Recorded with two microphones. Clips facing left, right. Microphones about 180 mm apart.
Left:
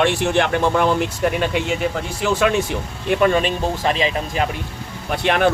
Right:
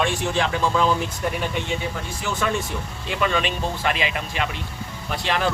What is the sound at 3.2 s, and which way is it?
Speech, 45° left (ahead or behind).